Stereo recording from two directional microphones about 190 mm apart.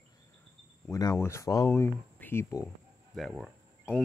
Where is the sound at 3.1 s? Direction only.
Centre (ahead or behind).